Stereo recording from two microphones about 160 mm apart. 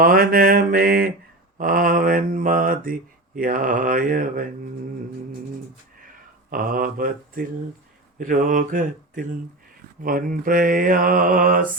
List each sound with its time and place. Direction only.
0.0 s mantra: 65° right (ahead or behind)
6.5 s mantra: 60° right (ahead or behind)